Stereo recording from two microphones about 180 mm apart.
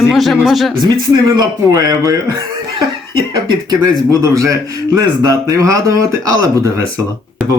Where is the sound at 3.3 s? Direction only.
20° right (ahead or behind).